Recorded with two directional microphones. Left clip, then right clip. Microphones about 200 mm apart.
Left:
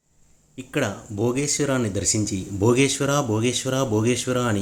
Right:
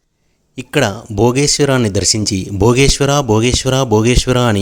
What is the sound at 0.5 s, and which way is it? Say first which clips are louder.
Speech: right 10 dB; 55° right (ahead or behind).